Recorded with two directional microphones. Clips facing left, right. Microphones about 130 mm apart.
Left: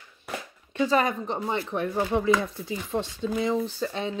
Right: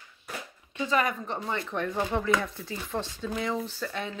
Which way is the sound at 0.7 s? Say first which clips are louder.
Left 4 dB; 30° left (ahead or behind).